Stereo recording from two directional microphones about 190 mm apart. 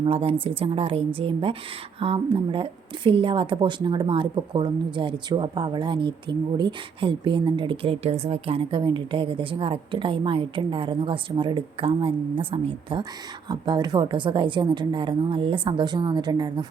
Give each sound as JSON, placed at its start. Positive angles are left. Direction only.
{"t": 0.0, "sound": "a woman's voice", "side_deg": -30}